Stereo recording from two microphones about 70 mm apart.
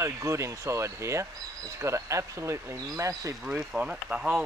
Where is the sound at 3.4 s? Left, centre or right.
Centre.